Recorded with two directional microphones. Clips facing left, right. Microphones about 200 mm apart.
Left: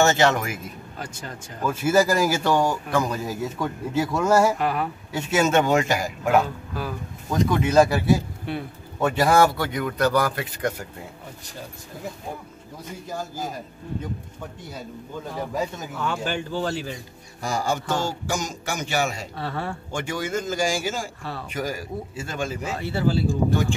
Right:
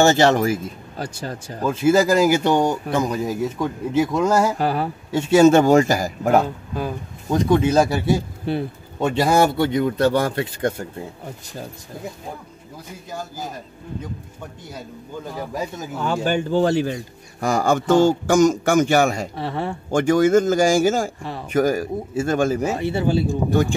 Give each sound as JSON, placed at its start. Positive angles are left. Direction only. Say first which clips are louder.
{"t": 0.0, "sound": "speech", "louder": "right 4 dB", "side_deg": -35}
{"t": 1.7, "sound": "speech", "louder": "right 4 dB", "side_deg": -20}
{"t": 4.6, "sound": "speech", "louder": "right 3 dB", "side_deg": -35}
{"t": 6.7, "sound": "speech", "louder": "right 4 dB", "side_deg": -20}
{"t": 16.0, "sound": "speech", "louder": "right 6 dB", "side_deg": -45}
{"t": 19.3, "sound": "speech", "louder": "right 4 dB", "side_deg": -20}
{"t": 19.9, "sound": "speech", "louder": "right 15 dB", "side_deg": -45}
{"t": 21.2, "sound": "speech", "louder": "right 3 dB", "side_deg": -20}
{"t": 21.5, "sound": "speech", "louder": "right 11 dB", "side_deg": -45}
{"t": 22.8, "sound": "speech", "louder": "right 3 dB", "side_deg": -20}